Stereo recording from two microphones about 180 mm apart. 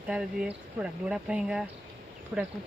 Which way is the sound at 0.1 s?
5° right (ahead or behind).